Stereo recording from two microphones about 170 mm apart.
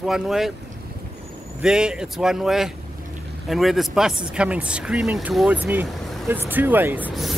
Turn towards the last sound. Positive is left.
turn(degrees=0)  # may be behind; listen again after turning